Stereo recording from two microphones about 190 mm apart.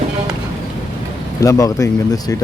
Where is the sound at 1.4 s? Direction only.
20° left (ahead or behind).